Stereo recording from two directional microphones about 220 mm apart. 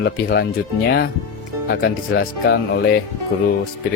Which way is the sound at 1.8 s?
50° left (ahead or behind).